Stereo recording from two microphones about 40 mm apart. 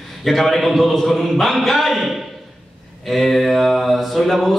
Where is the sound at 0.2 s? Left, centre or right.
Centre.